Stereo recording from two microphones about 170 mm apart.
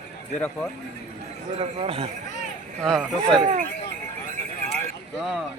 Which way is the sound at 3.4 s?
50° right (ahead or behind).